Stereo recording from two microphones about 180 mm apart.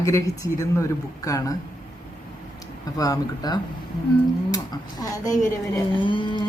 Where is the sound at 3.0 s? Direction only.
20° left (ahead or behind).